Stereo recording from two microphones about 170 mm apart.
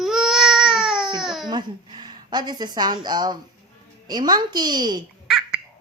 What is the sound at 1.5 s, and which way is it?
A woman's voice, 25° right (ahead or behind).